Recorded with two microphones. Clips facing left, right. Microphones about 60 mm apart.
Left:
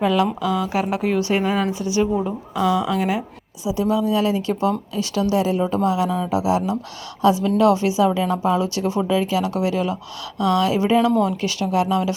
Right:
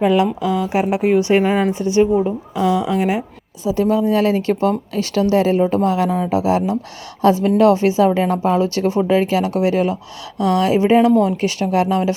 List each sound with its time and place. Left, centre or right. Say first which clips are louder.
0.0 s speech: right 3 dB; right
1.3 s speech: right 5 dB; right
3.6 s speech: right 4 dB; right